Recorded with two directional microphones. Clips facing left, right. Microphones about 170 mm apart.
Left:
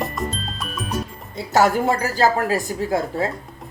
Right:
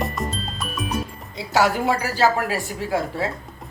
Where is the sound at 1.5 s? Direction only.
45° left (ahead or behind).